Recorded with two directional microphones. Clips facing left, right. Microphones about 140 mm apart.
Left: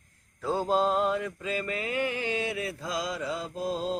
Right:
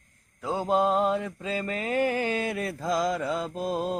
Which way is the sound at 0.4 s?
15° right (ahead or behind).